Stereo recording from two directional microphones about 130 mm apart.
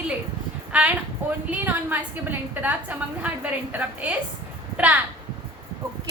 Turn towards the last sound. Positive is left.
turn(degrees=-10)  # may be behind; listen again after turning